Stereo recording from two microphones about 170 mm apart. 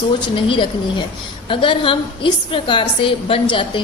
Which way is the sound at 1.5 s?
30° left (ahead or behind).